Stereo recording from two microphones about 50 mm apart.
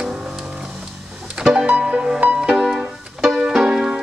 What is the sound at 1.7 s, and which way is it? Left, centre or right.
Music, centre.